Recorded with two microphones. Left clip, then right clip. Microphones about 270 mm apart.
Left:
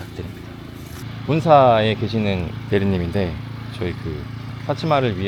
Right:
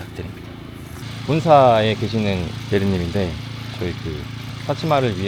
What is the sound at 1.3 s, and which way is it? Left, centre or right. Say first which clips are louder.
Speech: even; centre.